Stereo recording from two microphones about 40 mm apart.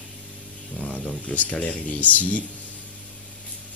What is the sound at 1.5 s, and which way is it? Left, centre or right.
Speech, left.